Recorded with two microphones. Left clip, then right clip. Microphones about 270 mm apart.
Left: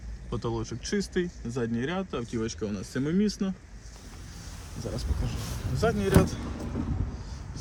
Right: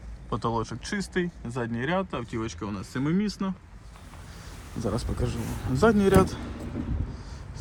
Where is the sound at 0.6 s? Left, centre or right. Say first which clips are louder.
Left 2 dB; centre.